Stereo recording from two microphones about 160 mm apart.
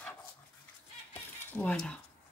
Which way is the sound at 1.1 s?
10° left (ahead or behind).